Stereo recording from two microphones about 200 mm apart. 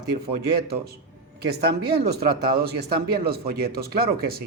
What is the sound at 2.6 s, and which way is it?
Speech, 50° right (ahead or behind).